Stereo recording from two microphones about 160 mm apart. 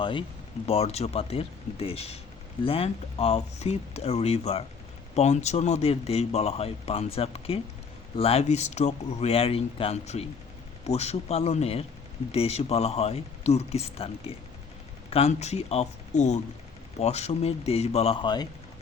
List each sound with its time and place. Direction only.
0.0 s speech: 30° left (ahead or behind)